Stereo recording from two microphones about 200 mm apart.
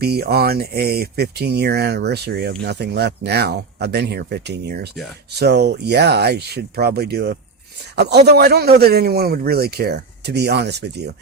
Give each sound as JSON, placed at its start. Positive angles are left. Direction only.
{"t": 0.0, "sound": "a man's voice", "side_deg": -50}